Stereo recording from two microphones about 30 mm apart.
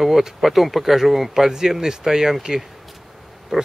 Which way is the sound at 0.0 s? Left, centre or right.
Centre.